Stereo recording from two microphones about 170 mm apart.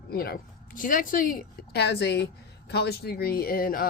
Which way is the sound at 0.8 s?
55° left (ahead or behind).